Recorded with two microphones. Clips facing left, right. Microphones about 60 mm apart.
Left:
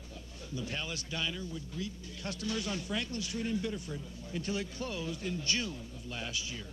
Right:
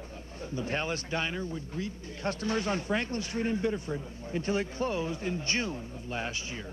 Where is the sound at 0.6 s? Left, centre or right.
Right.